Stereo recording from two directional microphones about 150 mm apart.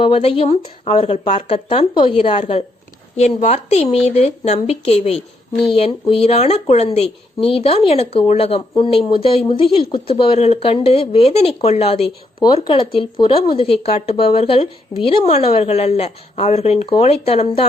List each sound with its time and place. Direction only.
0.0 s a woman's voice: 40° left (ahead or behind)